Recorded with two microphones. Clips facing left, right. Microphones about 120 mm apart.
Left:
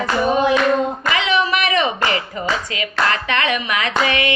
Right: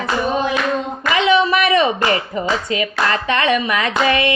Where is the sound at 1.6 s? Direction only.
35° right (ahead or behind).